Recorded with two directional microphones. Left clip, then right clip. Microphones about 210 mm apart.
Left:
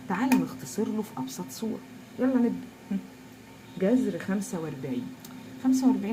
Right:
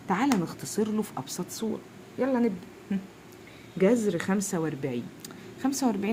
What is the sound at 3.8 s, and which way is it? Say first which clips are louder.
Speech: right 2 dB; 55° right (ahead or behind).